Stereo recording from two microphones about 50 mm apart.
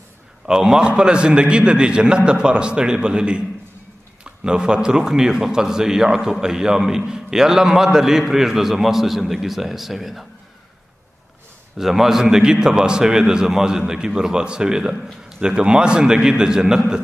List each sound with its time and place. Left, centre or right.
0.5 s a man's voice: centre
11.8 s a man's voice: centre